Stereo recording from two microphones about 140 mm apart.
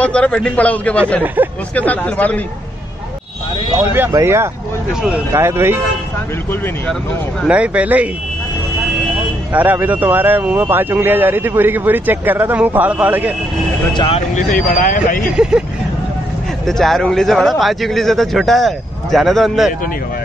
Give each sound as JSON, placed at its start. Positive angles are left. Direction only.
{"t": 0.0, "sound": "a man's voice", "side_deg": 10}
{"t": 1.2, "sound": "speech", "side_deg": -10}
{"t": 1.8, "sound": "a man's voice", "side_deg": 10}
{"t": 3.9, "sound": "speech", "side_deg": -15}
{"t": 7.4, "sound": "speech", "side_deg": -10}
{"t": 9.5, "sound": "speech", "side_deg": -10}
{"t": 13.9, "sound": "speech", "side_deg": 40}
{"t": 14.3, "sound": "speech", "side_deg": 70}
{"t": 16.6, "sound": "a man's voice", "side_deg": 0}